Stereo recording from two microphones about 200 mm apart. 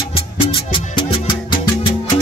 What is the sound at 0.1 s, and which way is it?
Music, 25° left (ahead or behind).